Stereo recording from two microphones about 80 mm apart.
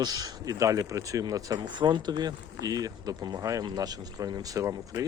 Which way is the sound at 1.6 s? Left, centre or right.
Right.